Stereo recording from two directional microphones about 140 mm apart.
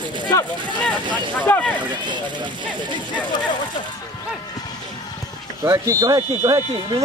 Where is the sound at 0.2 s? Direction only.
25° left (ahead or behind).